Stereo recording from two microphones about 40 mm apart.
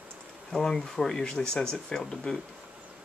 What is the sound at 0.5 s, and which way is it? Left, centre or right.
Speech, centre.